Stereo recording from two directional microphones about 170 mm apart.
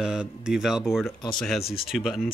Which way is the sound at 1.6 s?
35° left (ahead or behind).